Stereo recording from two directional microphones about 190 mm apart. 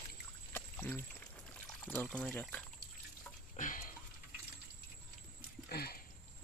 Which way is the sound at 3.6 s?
45° left (ahead or behind).